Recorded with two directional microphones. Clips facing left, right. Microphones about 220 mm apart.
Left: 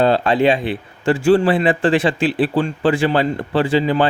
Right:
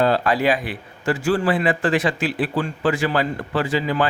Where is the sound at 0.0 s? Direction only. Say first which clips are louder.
Left 4 dB; 25° left (ahead or behind).